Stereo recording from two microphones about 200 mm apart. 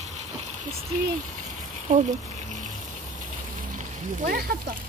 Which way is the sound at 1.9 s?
35° right (ahead or behind).